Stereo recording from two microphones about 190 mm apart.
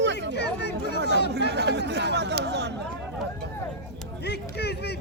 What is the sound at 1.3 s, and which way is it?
Speech, 60° right (ahead or behind).